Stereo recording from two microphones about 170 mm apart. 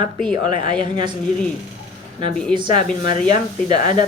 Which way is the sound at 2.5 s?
30° right (ahead or behind).